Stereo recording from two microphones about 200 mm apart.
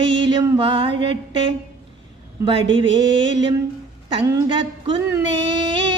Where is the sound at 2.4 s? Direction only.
25° right (ahead or behind).